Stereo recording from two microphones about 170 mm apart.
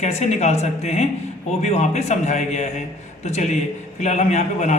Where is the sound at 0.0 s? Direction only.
40° left (ahead or behind).